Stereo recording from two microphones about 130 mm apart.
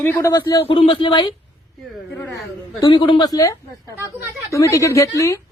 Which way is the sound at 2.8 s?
35° left (ahead or behind).